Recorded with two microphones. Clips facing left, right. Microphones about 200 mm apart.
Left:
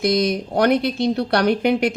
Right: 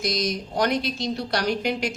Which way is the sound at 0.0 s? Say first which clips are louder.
Left 8 dB; 60° left (ahead or behind).